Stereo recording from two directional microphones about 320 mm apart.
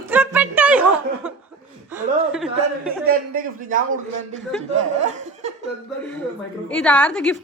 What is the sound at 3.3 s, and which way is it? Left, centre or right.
Speech, right.